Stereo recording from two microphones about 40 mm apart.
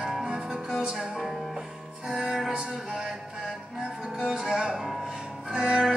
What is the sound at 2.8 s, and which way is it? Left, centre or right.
Music, centre.